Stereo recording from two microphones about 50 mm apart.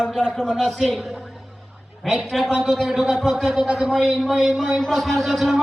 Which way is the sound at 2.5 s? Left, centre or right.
Centre.